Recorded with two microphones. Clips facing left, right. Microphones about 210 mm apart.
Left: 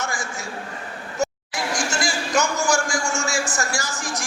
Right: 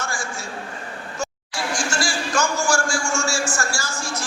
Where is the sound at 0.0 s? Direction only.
20° left (ahead or behind).